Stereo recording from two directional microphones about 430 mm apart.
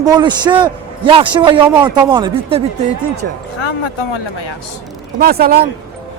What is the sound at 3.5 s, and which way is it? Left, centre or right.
Speech, left.